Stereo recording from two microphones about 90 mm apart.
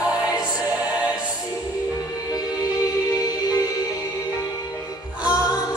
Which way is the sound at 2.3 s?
45° left (ahead or behind).